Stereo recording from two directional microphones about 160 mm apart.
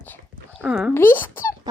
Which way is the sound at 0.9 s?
15° left (ahead or behind).